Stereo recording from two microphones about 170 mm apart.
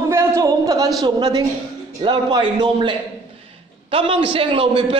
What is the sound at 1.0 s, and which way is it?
A man's voice, 25° right (ahead or behind).